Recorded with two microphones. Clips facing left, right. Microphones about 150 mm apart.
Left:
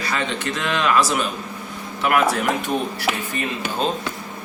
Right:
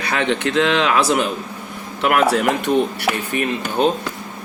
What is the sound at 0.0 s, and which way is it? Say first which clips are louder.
A man's voice: right 5 dB; 65° right (ahead or behind).